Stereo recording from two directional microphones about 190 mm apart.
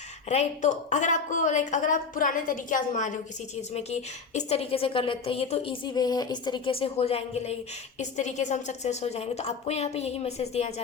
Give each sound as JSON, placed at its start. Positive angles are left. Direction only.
{"t": 0.3, "sound": "a woman's voice", "side_deg": 40}